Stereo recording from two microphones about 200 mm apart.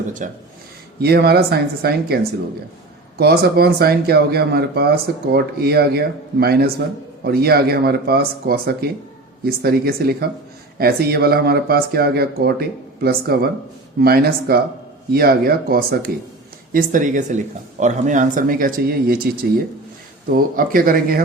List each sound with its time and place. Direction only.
0.2 s speech: 40° right (ahead or behind)
0.9 s speech: 50° right (ahead or behind)